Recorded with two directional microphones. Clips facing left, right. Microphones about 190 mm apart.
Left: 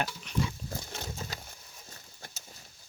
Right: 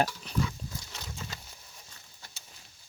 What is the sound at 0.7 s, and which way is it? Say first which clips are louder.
Pig: left 4 dB; 50° left (ahead or behind).